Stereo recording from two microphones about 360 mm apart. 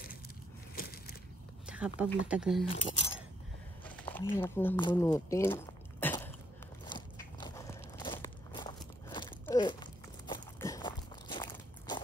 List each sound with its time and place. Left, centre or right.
0.7 s a sound: left
1.7 s speech: centre
2.6 s speech: centre
6.8 s biting: centre